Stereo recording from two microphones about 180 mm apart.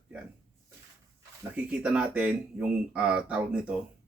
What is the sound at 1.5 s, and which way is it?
A man's voice, 5° right (ahead or behind).